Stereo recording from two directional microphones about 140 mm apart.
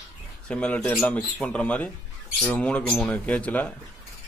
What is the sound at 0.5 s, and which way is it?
Speech, 10° left (ahead or behind).